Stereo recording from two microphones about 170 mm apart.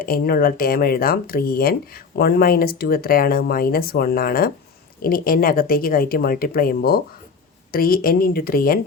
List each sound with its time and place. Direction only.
0.0 s speech: 60° left (ahead or behind)